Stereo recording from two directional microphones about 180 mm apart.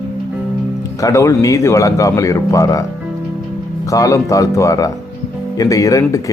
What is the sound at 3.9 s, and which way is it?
Speech, 15° left (ahead or behind).